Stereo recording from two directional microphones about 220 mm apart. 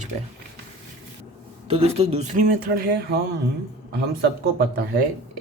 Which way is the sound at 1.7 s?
25° right (ahead or behind).